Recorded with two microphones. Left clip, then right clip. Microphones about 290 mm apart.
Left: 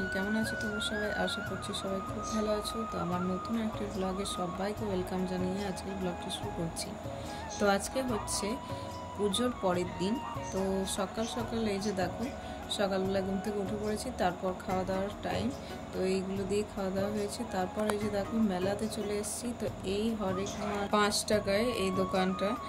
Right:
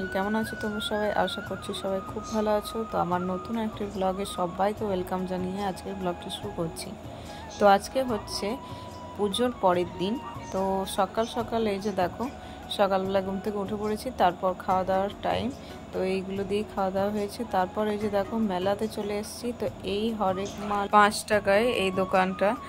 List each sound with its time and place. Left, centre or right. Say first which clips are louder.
0.1 s speech: right 4 dB; centre
7.6 s speech: right 9 dB; centre
9.3 s speech: right 9 dB; centre